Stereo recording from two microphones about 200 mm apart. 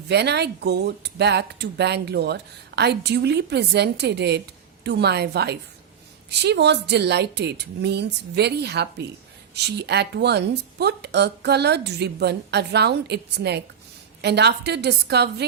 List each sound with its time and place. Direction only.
0.1 s speech: 55° right (ahead or behind)